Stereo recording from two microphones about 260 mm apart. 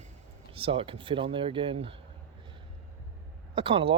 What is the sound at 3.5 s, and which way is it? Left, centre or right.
Speech, right.